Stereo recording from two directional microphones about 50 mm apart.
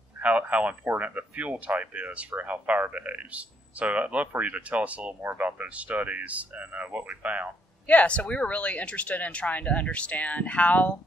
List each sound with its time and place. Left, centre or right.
0.2 s speech: right
7.8 s speech: left